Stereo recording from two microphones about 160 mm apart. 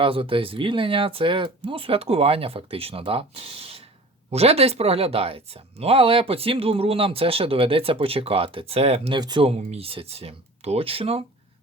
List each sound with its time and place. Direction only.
0.0 s speech: 35° right (ahead or behind)
9.5 s speech: 40° right (ahead or behind)